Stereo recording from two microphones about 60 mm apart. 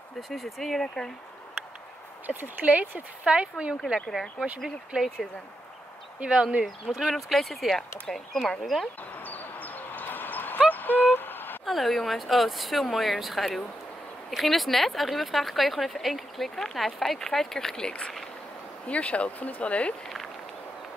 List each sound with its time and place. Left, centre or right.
0.3 s speech: centre
2.2 s speech: right; by 5.3 s centre
6.1 s speech: centre
6.6 s speech: centre
9.1 s dog: left
10.7 s a sound: left
11.6 s speech: centre; by 19.9 s left